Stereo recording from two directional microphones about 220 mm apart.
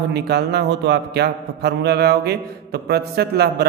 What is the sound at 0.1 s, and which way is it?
A man's voice, 50° right (ahead or behind).